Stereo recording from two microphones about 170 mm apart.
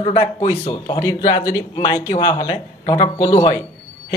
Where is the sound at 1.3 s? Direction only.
20° left (ahead or behind).